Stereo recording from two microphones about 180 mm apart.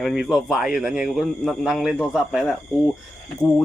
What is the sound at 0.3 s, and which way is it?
Speech, centre (ahead or behind).